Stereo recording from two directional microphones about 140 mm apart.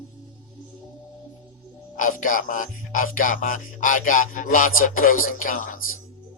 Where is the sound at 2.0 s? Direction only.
70° left (ahead or behind).